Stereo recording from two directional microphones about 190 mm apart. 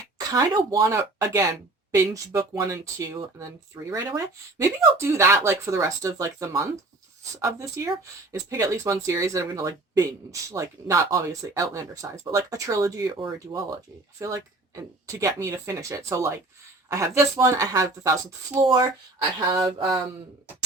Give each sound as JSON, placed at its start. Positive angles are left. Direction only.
{"t": 0.2, "sound": "a woman's voice", "side_deg": -20}
{"t": 14.8, "sound": "a woman's voice", "side_deg": -15}